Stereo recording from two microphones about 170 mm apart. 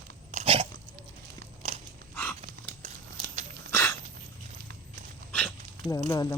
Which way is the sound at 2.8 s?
45° right (ahead or behind).